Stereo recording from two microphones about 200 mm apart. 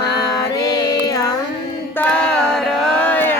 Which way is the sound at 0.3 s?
15° left (ahead or behind).